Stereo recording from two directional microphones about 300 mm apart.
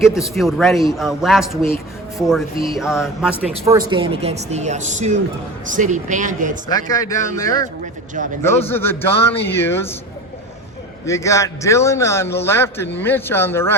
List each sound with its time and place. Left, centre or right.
0.2 s a man's voice: centre
3.5 s speech: centre
6.7 s a man's voice: centre
11.0 s a man's voice: centre